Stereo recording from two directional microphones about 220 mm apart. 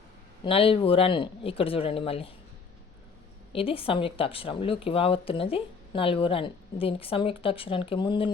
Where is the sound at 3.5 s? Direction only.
25° left (ahead or behind).